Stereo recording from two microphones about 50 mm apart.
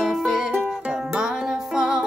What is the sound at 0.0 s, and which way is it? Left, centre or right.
Music, centre.